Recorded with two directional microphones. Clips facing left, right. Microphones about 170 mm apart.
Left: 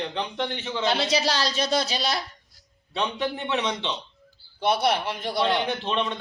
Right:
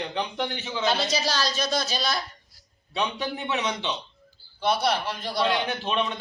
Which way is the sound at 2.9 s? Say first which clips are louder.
Left 1 dB; 5° right (ahead or behind).